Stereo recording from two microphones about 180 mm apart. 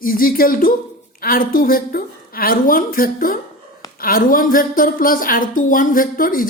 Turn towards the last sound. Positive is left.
turn(degrees=50)  # may be behind; listen again after turning